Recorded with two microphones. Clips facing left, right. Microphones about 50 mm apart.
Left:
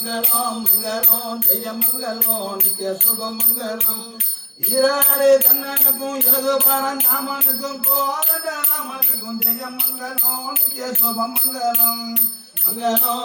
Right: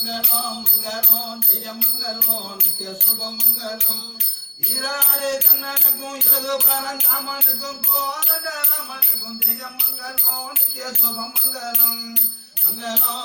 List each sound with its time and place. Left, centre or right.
0.0 s music: left
4.7 s jingle bell: left
4.9 s music: left
6.9 s music: centre
12.8 s music: left